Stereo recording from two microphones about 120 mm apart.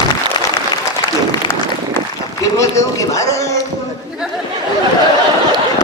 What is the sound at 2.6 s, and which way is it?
Speech, 25° left (ahead or behind).